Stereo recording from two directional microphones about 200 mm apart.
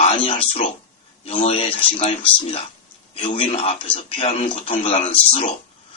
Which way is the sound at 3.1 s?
30° left (ahead or behind).